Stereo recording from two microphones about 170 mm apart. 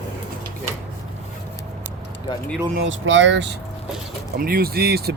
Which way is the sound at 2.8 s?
90° right.